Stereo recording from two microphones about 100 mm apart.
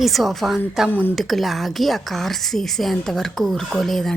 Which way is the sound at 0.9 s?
20° left (ahead or behind).